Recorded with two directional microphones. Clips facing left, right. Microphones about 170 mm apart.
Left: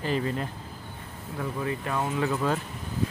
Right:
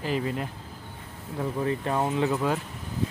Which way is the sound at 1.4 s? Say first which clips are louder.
Right 3 dB; 30° right (ahead or behind).